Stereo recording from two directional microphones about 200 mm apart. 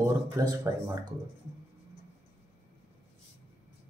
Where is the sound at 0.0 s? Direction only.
15° right (ahead or behind).